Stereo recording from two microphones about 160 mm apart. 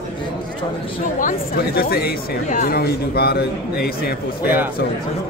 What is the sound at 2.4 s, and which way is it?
A man's voice, 60° left (ahead or behind).